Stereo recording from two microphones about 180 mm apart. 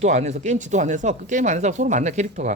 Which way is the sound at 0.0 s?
40° right (ahead or behind).